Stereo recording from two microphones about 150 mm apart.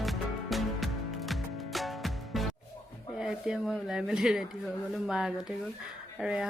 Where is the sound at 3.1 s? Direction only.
5° right (ahead or behind).